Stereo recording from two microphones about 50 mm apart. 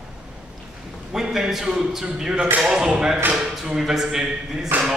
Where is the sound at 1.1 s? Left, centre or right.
Centre.